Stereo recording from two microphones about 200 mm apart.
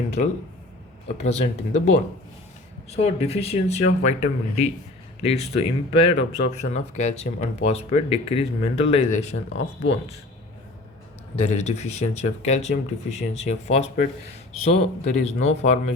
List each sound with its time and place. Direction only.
0.2 s speech: 40° left (ahead or behind)
11.3 s speech: 35° left (ahead or behind)